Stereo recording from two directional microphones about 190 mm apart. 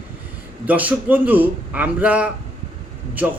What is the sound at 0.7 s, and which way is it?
A man's voice, 10° right (ahead or behind).